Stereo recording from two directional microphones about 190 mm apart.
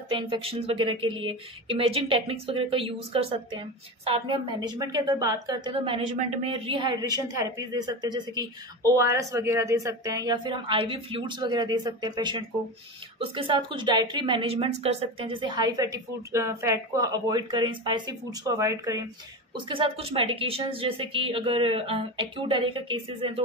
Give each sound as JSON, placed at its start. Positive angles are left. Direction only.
{"t": 0.1, "sound": "speech", "side_deg": -30}
{"t": 19.7, "sound": "speech", "side_deg": -30}